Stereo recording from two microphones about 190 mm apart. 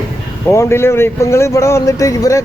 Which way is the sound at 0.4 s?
15° left (ahead or behind).